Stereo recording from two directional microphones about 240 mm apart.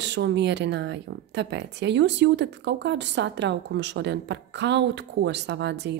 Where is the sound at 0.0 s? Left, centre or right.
Right.